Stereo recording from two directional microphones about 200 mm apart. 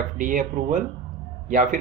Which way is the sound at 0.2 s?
40° right (ahead or behind).